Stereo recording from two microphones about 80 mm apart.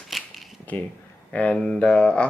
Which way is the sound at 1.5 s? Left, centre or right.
Centre.